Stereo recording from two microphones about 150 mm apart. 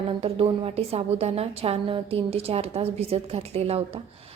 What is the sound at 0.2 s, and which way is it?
A woman's voice, 40° right (ahead or behind).